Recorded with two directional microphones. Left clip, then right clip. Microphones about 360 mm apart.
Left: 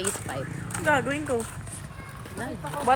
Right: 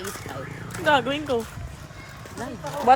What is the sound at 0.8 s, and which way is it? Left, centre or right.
Speech, centre.